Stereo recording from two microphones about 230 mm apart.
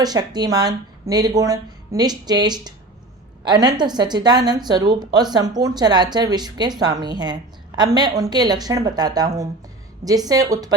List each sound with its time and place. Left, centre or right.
0.0 s a woman's voice: centre